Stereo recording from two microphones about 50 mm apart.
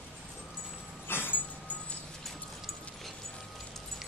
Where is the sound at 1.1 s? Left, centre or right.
Left.